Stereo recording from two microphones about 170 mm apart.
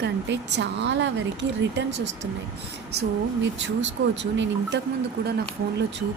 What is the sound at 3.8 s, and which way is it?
Speech, 90° right.